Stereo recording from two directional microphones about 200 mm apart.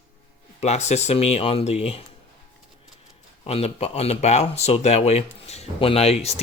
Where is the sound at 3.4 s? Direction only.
30° left (ahead or behind).